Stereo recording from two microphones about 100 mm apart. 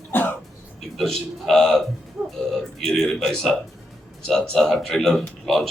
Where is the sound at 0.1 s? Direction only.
20° left (ahead or behind).